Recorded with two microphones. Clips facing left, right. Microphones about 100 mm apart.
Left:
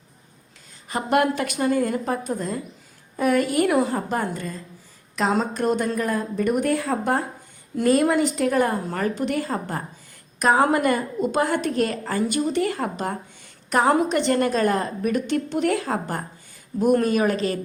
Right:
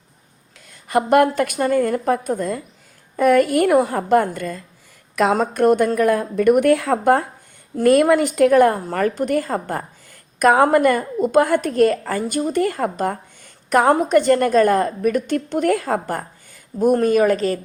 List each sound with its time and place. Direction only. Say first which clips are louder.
0.9 s a woman's voice: right 6 dB; 55° right (ahead or behind)